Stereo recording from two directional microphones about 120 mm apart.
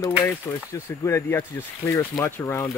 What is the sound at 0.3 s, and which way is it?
Speech, 25° left (ahead or behind).